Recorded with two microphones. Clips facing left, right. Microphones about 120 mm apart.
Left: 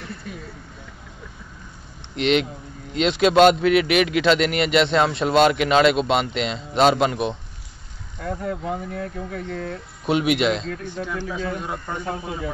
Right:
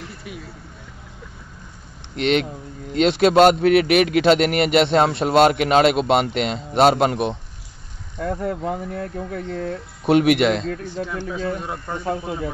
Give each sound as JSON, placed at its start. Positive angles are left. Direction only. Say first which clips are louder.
{"t": 2.1, "sound": "a man's voice", "louder": "even", "side_deg": -45}
{"t": 8.3, "sound": "speech", "louder": "right 2 dB", "side_deg": -40}
{"t": 10.0, "sound": "a man's voice", "louder": "right 4 dB", "side_deg": -60}
{"t": 11.0, "sound": "speech", "louder": "left 1 dB", "side_deg": -35}